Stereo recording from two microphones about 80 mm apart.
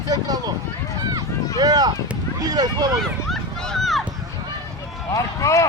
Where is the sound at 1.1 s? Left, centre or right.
Right.